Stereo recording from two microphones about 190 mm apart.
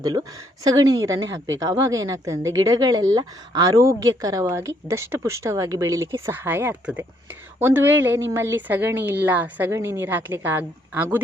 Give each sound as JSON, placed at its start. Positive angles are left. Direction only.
{"t": 0.0, "sound": "a woman's voice", "side_deg": -20}